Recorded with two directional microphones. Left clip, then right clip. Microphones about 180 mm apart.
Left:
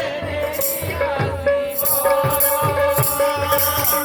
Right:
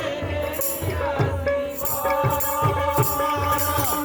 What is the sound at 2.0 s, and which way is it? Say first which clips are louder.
Music: left 5 dB; 30° left (ahead or behind).